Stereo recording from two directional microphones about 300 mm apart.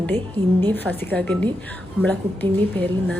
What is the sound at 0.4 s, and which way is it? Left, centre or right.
A woman's voice, centre.